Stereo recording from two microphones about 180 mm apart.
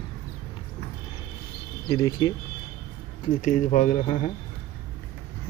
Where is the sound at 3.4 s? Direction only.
45° left (ahead or behind).